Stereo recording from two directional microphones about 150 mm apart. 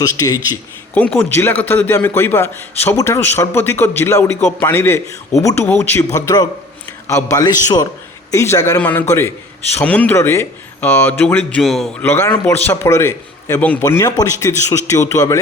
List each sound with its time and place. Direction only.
0.0 s a man's voice: 25° left (ahead or behind)
0.9 s a man's voice: 10° left (ahead or behind)
6.1 s a man's voice: 25° left (ahead or behind)
11.6 s a man's voice: centre (ahead or behind)
12.0 s a man's voice: 15° left (ahead or behind)